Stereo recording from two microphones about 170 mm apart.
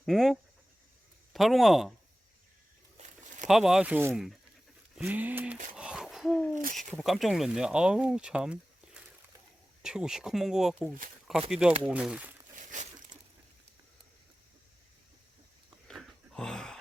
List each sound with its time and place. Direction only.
0.0 s speech: centre (ahead or behind)
3.0 s a sound: 40° right (ahead or behind)
3.4 s speech: centre (ahead or behind)
5.7 s hoot: 5° right (ahead or behind)
6.6 s speech: 55° right (ahead or behind)
6.9 s speech: centre (ahead or behind)
9.8 s speech: 5° right (ahead or behind)
12.5 s crumpling: 45° right (ahead or behind)
15.9 s a sound: centre (ahead or behind)